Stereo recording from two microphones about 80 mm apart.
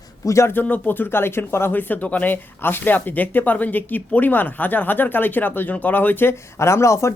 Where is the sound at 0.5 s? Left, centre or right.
Left.